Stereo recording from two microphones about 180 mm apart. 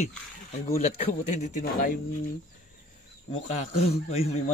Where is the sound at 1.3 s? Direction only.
40° left (ahead or behind).